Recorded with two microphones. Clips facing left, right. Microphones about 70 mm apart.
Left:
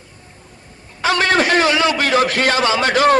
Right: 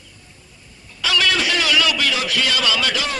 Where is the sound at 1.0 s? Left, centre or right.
Left.